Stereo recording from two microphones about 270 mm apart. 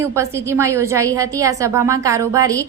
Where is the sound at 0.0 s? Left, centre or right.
Centre.